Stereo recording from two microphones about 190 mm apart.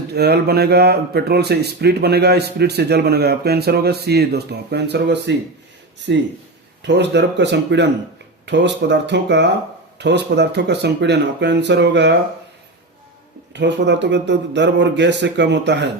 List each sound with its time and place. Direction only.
0.1 s speech: 60° right (ahead or behind)
13.5 s speech: 65° right (ahead or behind)